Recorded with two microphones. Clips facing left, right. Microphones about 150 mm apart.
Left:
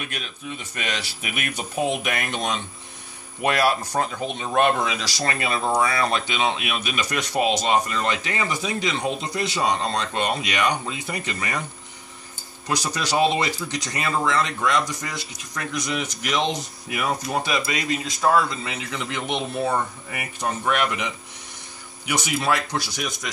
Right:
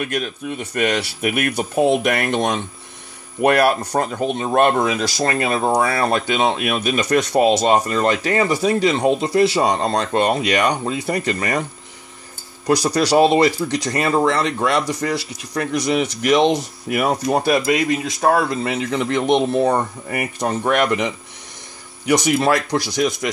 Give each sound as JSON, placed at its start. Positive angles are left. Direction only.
{"t": 0.0, "sound": "speech", "side_deg": -45}
{"t": 2.0, "sound": "speech", "side_deg": -40}
{"t": 2.3, "sound": "speech", "side_deg": -55}
{"t": 5.7, "sound": "speech", "side_deg": -40}
{"t": 8.9, "sound": "speech", "side_deg": -55}
{"t": 12.8, "sound": "speech", "side_deg": -35}
{"t": 13.7, "sound": "speech", "side_deg": -60}
{"t": 16.9, "sound": "speech", "side_deg": -40}
{"t": 17.4, "sound": "speech", "side_deg": -60}
{"t": 19.2, "sound": "speech", "side_deg": -75}
{"t": 19.7, "sound": "speech", "side_deg": -50}
{"t": 22.0, "sound": "speech", "side_deg": -40}
{"t": 22.7, "sound": "speech", "side_deg": -80}